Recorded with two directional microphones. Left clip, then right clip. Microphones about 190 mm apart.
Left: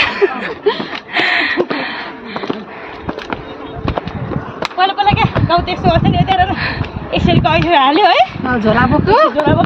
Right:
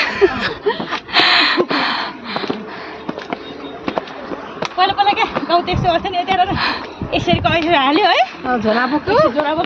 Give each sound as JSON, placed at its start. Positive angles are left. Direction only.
{"t": 0.2, "sound": "a sound", "side_deg": -30}
{"t": 4.7, "sound": "a sound", "side_deg": 0}
{"t": 5.7, "sound": "speech", "side_deg": 20}
{"t": 5.9, "sound": "speech", "side_deg": 0}
{"t": 6.5, "sound": "speech", "side_deg": -25}
{"t": 7.1, "sound": "speech", "side_deg": 0}
{"t": 8.5, "sound": "speech", "side_deg": 70}